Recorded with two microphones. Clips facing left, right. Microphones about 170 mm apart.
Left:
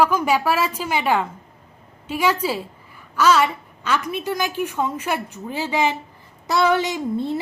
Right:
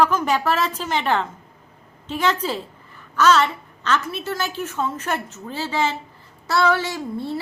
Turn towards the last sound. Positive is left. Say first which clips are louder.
# left 4 dB
turn(degrees=20)  # may be behind; listen again after turning